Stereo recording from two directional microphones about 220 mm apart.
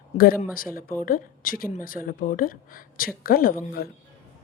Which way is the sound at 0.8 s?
40° left (ahead or behind).